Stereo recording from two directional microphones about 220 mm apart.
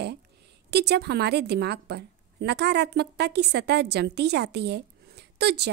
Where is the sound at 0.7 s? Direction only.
50° right (ahead or behind).